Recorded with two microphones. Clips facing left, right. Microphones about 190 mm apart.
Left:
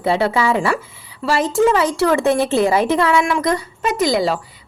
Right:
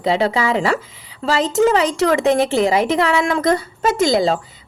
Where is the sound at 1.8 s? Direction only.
20° right (ahead or behind).